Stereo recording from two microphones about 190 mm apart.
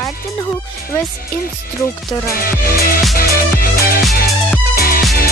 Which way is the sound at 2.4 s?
50° left (ahead or behind).